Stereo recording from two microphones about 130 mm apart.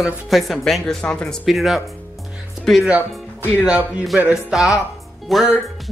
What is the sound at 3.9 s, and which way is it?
Speech, 5° right (ahead or behind).